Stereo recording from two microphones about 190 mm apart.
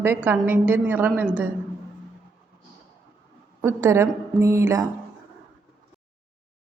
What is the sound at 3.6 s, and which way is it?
A woman's voice, 15° right (ahead or behind).